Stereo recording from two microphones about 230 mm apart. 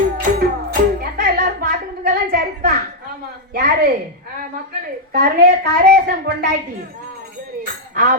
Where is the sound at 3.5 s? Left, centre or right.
Right.